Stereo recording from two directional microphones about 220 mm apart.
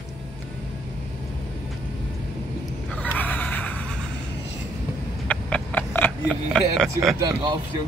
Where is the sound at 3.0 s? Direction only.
5° left (ahead or behind).